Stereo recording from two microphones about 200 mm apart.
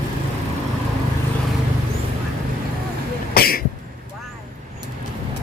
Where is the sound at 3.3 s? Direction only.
50° left (ahead or behind).